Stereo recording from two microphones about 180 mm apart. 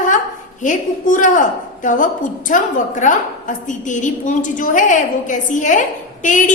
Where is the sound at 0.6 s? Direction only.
45° left (ahead or behind).